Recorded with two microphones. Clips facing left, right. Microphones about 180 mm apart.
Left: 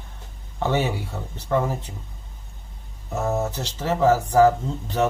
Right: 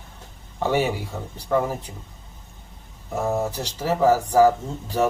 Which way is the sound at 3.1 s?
10° right (ahead or behind).